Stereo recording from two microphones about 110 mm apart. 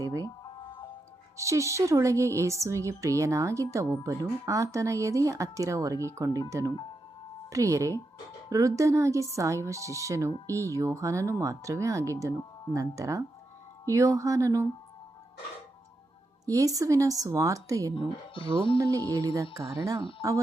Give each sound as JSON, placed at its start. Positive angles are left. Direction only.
{"t": 0.0, "sound": "music", "side_deg": -30}
{"t": 1.4, "sound": "a woman's voice", "side_deg": -30}
{"t": 16.5, "sound": "a woman's voice", "side_deg": -30}
{"t": 17.9, "sound": "speech", "side_deg": 50}
{"t": 18.8, "sound": "a woman's voice", "side_deg": -30}